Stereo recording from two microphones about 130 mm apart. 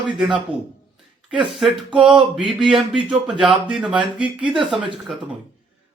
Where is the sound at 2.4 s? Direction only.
Centre (ahead or behind).